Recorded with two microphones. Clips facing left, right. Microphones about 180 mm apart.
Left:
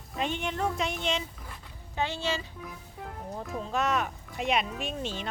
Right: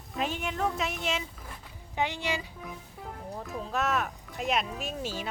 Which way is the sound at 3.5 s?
Centre (ahead or behind).